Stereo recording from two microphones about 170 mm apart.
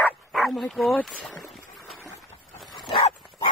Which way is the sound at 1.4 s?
Centre (ahead or behind).